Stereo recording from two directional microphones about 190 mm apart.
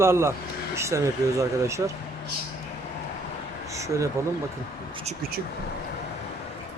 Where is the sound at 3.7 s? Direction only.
15° right (ahead or behind).